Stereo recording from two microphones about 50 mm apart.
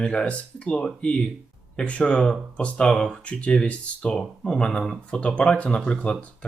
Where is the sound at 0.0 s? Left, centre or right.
Centre.